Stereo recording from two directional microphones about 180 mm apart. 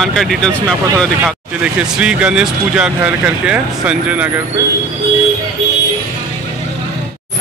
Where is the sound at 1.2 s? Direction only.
5° right (ahead or behind).